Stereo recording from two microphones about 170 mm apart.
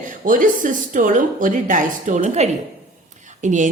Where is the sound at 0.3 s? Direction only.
50° right (ahead or behind).